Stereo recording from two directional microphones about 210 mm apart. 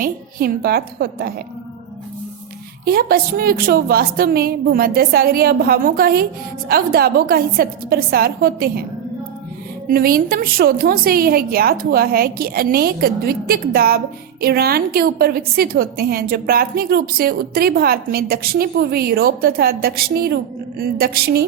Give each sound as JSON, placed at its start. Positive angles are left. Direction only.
{"t": 0.0, "sound": "a woman's voice", "side_deg": -45}
{"t": 2.8, "sound": "a woman's voice", "side_deg": -45}
{"t": 9.9, "sound": "a woman's voice", "side_deg": -45}